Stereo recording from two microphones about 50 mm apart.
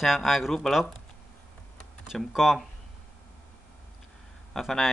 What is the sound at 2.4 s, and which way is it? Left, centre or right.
Speech, centre.